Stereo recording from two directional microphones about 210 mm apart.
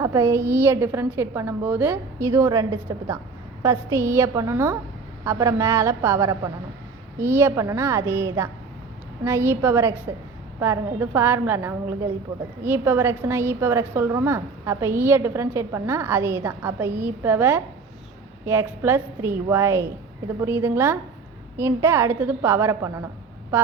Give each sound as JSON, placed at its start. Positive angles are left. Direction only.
{"t": 0.0, "sound": "a woman's voice", "side_deg": -15}